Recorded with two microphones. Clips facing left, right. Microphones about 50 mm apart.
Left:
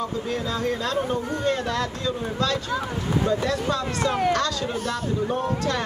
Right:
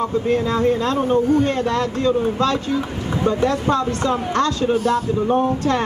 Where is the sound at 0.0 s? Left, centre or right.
Right.